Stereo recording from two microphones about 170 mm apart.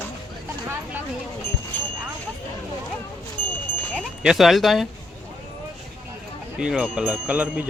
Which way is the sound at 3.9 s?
Centre (ahead or behind).